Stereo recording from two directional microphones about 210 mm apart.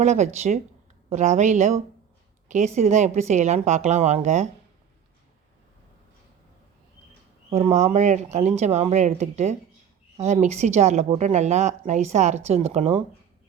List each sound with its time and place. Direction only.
0.0 s a woman's voice: 30° right (ahead or behind)
7.5 s a woman's voice: 30° right (ahead or behind)